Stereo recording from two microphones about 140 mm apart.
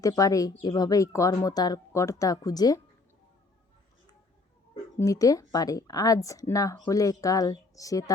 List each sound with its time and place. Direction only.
0.0 s speech: 25° left (ahead or behind)
4.9 s speech: 25° left (ahead or behind)